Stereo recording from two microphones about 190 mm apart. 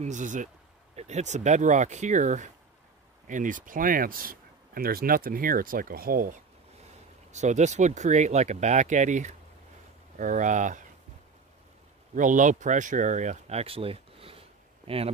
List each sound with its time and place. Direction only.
0.0 s speech: 40° right (ahead or behind)
7.3 s speech: 40° right (ahead or behind)
12.2 s speech: 40° right (ahead or behind)